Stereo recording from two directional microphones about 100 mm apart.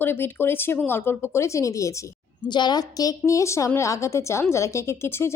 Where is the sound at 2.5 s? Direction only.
45° left (ahead or behind).